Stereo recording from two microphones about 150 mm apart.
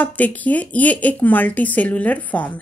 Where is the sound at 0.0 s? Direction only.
10° left (ahead or behind).